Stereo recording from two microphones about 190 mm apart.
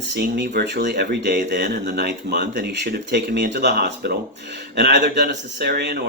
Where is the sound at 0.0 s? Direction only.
65° right (ahead or behind).